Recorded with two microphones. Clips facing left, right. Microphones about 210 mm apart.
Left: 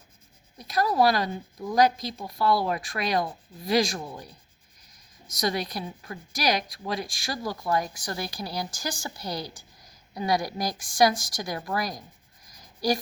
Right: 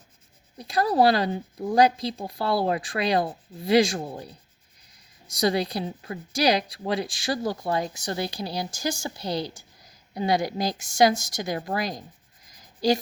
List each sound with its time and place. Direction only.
0.6 s a woman's voice: 30° right (ahead or behind)
5.4 s a woman's voice: 30° right (ahead or behind)